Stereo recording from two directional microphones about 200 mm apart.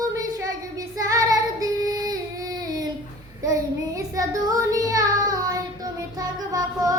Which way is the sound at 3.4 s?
15° right (ahead or behind).